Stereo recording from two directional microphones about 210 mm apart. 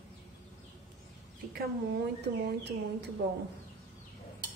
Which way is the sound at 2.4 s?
50° right (ahead or behind).